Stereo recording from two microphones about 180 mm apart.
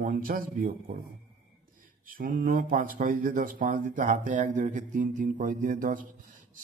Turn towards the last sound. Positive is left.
turn(degrees=-50)  # may be behind; listen again after turning